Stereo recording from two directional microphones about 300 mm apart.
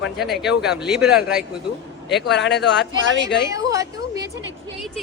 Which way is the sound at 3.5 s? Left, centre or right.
Centre.